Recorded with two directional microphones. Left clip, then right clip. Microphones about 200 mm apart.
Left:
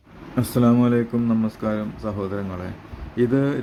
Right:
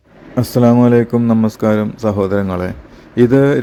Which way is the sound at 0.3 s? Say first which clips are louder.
Right 8 dB; 20° right (ahead or behind).